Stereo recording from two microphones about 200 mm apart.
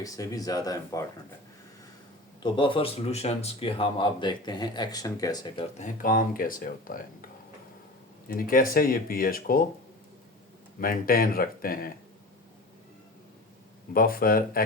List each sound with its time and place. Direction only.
0.0 s speech: 15° left (ahead or behind)
2.4 s speech: 25° left (ahead or behind)
5.7 s speech: 40° left (ahead or behind)
8.3 s speech: 45° left (ahead or behind)
10.8 s speech: 45° left (ahead or behind)
13.9 s speech: 45° left (ahead or behind)